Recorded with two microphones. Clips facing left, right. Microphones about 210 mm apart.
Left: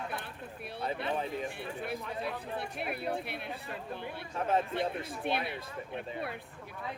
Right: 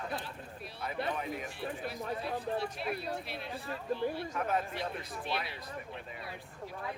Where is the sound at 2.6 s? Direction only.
55° left (ahead or behind).